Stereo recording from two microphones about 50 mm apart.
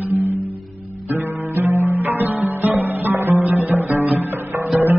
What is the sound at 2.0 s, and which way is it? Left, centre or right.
Music, right.